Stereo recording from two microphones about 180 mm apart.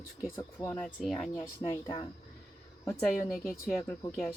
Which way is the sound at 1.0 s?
Centre (ahead or behind).